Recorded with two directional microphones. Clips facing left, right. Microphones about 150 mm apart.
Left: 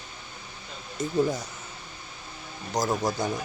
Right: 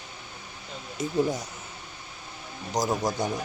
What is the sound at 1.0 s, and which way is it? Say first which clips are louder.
Speech: even; 10° right (ahead or behind).